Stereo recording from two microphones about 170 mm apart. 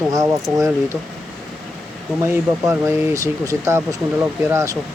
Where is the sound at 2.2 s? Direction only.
15° right (ahead or behind).